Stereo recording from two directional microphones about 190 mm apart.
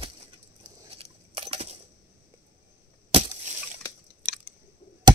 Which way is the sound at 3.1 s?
35° right (ahead or behind).